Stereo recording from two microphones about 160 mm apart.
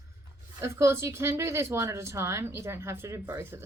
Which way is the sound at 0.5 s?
15° right (ahead or behind).